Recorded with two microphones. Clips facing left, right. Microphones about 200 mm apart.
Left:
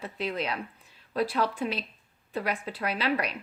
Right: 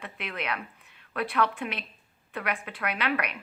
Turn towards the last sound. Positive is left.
turn(degrees=30)  # may be behind; listen again after turning